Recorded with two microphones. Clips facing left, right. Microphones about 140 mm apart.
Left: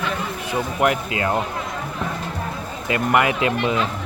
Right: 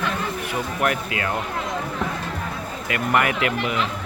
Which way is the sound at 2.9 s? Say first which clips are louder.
Left 3 dB; 20° left (ahead or behind).